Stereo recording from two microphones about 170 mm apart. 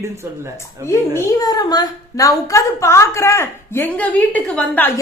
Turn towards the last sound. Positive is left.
turn(degrees=10)  # may be behind; listen again after turning